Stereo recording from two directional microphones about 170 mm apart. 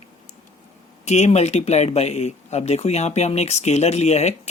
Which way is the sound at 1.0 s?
40° left (ahead or behind).